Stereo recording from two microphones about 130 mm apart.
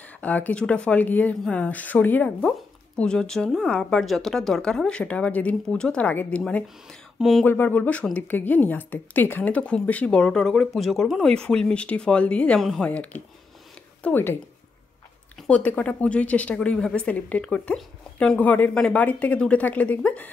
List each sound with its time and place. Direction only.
0.0 s speech: 10° left (ahead or behind)
7.4 s speech: 15° left (ahead or behind)
15.3 s speech: 10° left (ahead or behind)